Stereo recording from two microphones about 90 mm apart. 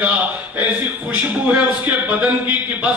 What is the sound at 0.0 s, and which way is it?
A man's voice, 15° right (ahead or behind).